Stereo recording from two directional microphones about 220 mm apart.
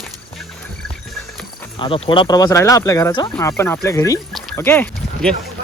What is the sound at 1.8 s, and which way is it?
Speech, 20° left (ahead or behind).